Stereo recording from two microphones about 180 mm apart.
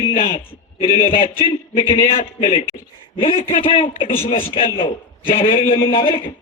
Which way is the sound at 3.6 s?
30° left (ahead or behind).